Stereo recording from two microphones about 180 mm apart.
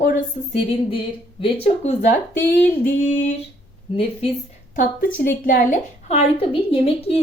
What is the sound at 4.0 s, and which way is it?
Speech, 30° left (ahead or behind).